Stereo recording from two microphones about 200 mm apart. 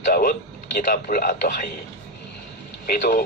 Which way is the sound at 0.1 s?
50° left (ahead or behind).